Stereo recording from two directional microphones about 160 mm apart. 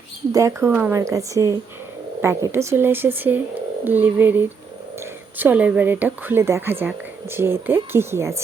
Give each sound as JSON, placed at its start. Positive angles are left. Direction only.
{"t": 0.3, "sound": "a woman's voice", "side_deg": -15}